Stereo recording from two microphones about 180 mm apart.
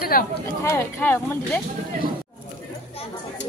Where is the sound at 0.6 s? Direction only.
15° left (ahead or behind).